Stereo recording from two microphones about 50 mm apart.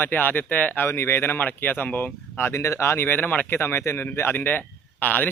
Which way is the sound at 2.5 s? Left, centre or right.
Left.